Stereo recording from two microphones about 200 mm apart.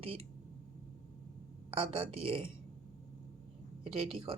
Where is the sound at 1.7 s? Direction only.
25° right (ahead or behind).